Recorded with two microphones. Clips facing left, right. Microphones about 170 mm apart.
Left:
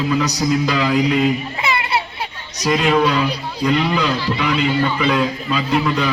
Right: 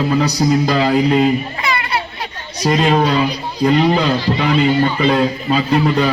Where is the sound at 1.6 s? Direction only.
25° left (ahead or behind).